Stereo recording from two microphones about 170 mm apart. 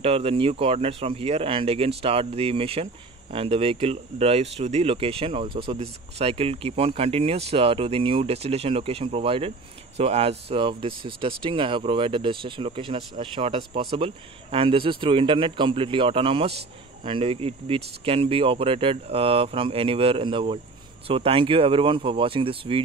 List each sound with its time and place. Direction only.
0.0 s speech: 35° right (ahead or behind)